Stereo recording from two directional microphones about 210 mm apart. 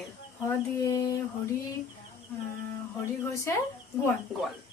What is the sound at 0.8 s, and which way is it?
Speech, 15° left (ahead or behind).